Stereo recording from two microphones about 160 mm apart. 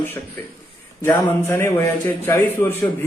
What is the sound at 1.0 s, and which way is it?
A man's voice, 15° left (ahead or behind).